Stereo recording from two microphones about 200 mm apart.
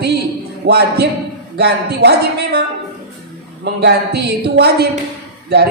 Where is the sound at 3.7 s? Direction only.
55° right (ahead or behind).